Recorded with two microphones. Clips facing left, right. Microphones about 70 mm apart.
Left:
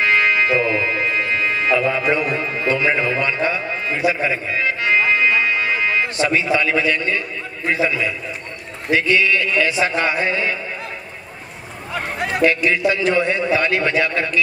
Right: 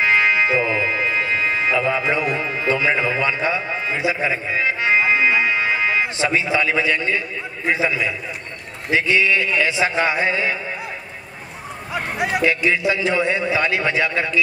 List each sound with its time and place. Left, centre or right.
0.0 s music: right
2.7 s a man's voice: right
11.9 s a man's voice: centre